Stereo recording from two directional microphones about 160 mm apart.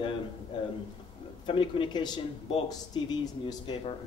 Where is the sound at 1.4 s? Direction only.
30° left (ahead or behind).